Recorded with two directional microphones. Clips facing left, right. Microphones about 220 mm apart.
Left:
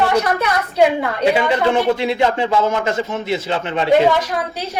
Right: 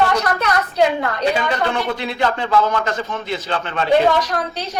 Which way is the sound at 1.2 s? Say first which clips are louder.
Left 5 dB; 25° left (ahead or behind).